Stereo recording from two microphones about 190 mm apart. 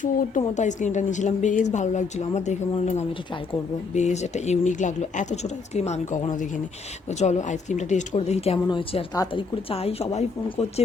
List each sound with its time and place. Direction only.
0.0 s speech: 45° left (ahead or behind)